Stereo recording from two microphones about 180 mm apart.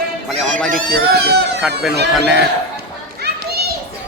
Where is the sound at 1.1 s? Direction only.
65° right (ahead or behind).